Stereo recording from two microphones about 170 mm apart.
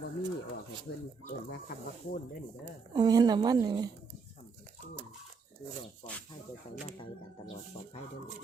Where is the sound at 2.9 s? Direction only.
25° right (ahead or behind).